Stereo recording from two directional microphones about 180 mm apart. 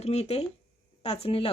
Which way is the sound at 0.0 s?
35° left (ahead or behind).